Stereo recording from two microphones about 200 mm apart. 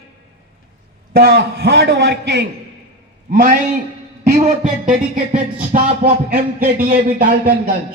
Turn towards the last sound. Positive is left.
turn(degrees=-50)  # may be behind; listen again after turning